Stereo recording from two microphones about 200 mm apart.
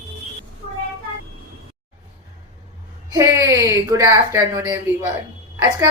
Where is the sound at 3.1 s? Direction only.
15° right (ahead or behind).